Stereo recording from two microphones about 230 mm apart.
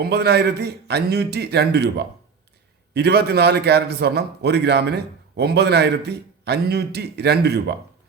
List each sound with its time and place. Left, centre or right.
0.0 s a man's voice: right